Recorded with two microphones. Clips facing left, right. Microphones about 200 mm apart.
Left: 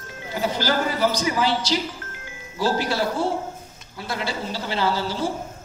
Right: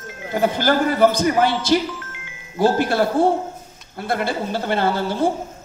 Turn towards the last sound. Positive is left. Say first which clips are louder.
# right 4 dB
turn(degrees=-55)  # may be behind; listen again after turning